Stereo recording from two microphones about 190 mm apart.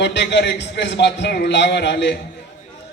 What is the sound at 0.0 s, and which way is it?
A man's voice, 65° left (ahead or behind).